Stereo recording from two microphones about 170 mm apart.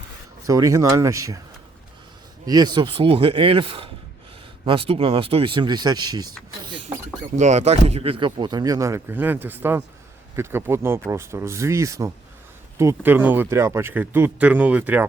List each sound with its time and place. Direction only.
0.4 s speech: 20° right (ahead or behind)
2.5 s speech: 25° right (ahead or behind)
7.3 s speech: 45° right (ahead or behind); by 15.0 s 10° right (ahead or behind)